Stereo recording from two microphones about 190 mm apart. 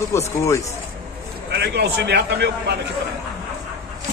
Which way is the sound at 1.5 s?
60° right (ahead or behind).